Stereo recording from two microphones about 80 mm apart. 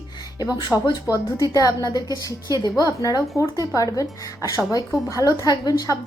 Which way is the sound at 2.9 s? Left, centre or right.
Left.